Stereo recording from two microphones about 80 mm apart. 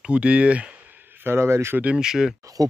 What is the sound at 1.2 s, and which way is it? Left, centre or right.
Speech, right.